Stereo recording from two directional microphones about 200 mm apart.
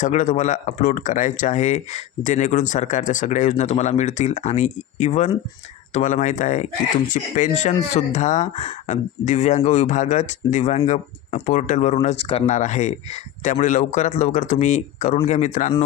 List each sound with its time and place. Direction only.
0.0 s speech: 35° left (ahead or behind)